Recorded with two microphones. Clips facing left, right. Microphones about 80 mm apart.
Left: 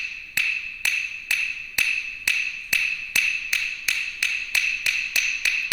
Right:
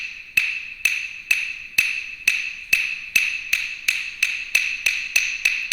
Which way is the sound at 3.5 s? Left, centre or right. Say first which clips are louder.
Right 1 dB; centre.